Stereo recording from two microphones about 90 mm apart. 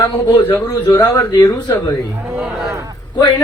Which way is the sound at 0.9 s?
35° left (ahead or behind).